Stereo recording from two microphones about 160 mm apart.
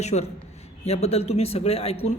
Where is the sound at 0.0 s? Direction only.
45° left (ahead or behind).